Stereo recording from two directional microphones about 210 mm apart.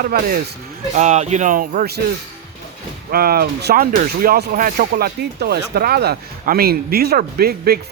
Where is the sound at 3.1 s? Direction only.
45° right (ahead or behind).